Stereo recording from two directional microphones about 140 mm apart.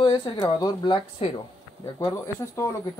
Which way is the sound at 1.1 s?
40° left (ahead or behind).